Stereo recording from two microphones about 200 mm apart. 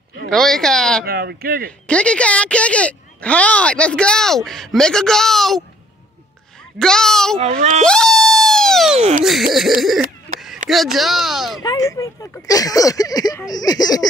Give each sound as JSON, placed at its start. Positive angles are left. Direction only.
{"t": 0.3, "sound": "speech", "side_deg": 0}
{"t": 1.0, "sound": "speech", "side_deg": -50}
{"t": 1.9, "sound": "speech", "side_deg": 5}
{"t": 6.8, "sound": "speech", "side_deg": 5}
{"t": 7.3, "sound": "speech", "side_deg": -35}
{"t": 7.8, "sound": "a sound", "side_deg": 5}
{"t": 8.9, "sound": "speech", "side_deg": -30}
{"t": 9.8, "sound": "speech", "side_deg": 0}
{"t": 11.6, "sound": "speech", "side_deg": 15}